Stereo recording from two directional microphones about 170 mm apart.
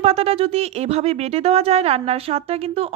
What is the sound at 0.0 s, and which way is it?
Speech, 35° right (ahead or behind).